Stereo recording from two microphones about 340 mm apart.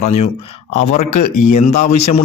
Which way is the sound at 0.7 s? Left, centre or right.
Left.